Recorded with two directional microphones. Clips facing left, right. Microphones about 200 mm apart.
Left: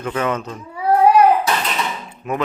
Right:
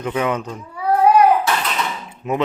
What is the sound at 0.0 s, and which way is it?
Speech, 15° right (ahead or behind).